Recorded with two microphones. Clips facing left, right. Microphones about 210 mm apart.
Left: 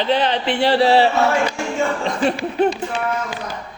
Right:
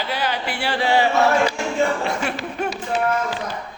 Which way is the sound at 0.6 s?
35° left (ahead or behind).